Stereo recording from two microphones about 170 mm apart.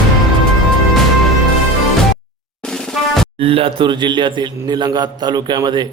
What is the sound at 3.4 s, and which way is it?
A man's voice, 35° right (ahead or behind).